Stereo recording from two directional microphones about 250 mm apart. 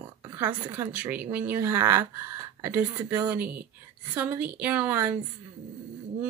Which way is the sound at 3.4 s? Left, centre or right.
Right.